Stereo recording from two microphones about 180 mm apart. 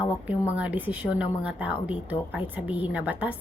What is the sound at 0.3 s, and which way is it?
A woman's voice, 10° right (ahead or behind).